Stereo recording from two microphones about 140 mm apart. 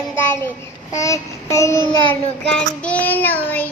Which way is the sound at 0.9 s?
25° left (ahead or behind).